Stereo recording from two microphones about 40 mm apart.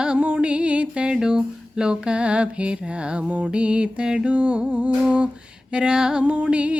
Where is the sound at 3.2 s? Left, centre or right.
Right.